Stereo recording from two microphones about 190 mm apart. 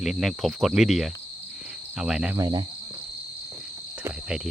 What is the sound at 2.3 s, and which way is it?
Speech, 20° right (ahead or behind).